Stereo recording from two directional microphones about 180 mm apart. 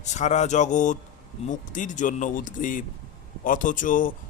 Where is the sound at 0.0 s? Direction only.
40° left (ahead or behind).